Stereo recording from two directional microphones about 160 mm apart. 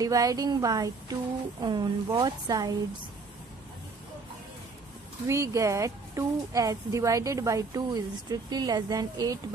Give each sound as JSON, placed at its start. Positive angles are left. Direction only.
{"t": 0.0, "sound": "speech", "side_deg": -20}
{"t": 5.2, "sound": "speech", "side_deg": -20}